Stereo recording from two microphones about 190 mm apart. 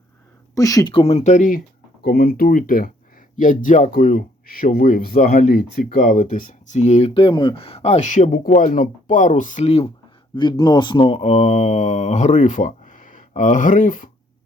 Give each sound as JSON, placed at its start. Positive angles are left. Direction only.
{"t": 0.5, "sound": "speech", "side_deg": 20}
{"t": 10.3, "sound": "speech", "side_deg": 20}